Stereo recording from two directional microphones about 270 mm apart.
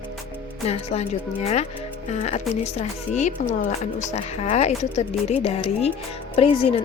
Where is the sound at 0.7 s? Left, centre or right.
Left.